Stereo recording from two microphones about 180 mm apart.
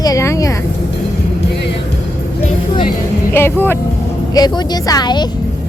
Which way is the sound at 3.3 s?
10° left (ahead or behind).